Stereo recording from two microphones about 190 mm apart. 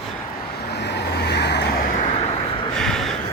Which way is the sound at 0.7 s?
65° left (ahead or behind).